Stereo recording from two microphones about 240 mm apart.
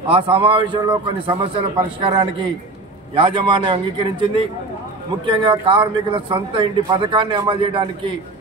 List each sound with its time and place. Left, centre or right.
0.1 s a man's voice: right